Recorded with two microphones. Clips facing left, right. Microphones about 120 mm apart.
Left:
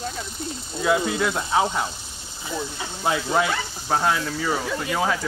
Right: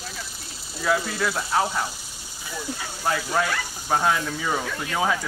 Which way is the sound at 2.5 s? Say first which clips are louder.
Left 2 dB; 20° left (ahead or behind).